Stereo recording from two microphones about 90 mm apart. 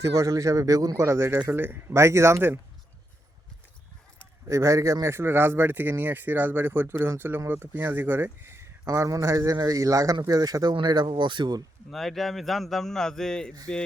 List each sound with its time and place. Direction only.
0.0 s speech: 40° right (ahead or behind)
1.0 s speech: 30° right (ahead or behind)
4.4 s speech: 35° right (ahead or behind); by 11.6 s 55° right (ahead or behind)
11.9 s a man's voice: 5° left (ahead or behind)